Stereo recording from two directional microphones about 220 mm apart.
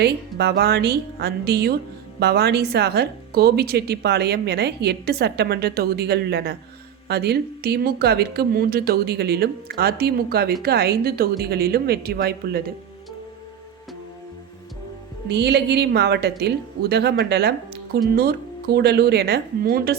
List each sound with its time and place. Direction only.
0.0 s speech: 50° right (ahead or behind)
15.3 s speech: 50° right (ahead or behind)